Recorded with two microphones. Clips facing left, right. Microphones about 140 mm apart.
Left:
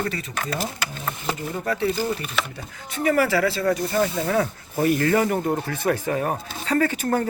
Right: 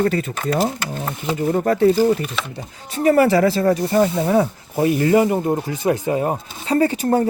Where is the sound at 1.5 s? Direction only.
45° right (ahead or behind).